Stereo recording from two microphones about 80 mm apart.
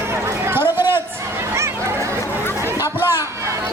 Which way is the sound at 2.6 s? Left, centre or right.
Right.